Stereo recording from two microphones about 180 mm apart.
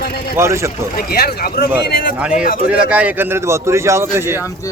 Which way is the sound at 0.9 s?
60° left (ahead or behind).